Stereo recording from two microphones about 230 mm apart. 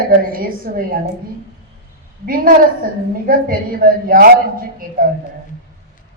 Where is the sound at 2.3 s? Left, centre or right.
Right.